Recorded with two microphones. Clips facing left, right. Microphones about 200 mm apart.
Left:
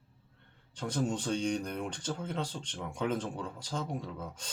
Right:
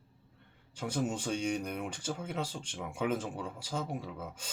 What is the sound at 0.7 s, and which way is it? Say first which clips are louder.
Speech: left 1 dB; 10° right (ahead or behind).